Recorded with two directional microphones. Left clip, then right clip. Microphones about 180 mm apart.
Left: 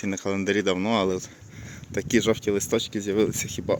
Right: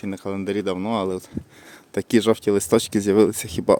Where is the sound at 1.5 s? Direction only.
25° right (ahead or behind).